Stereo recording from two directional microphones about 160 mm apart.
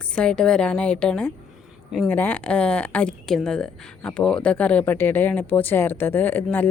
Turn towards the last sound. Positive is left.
turn(degrees=10)  # may be behind; listen again after turning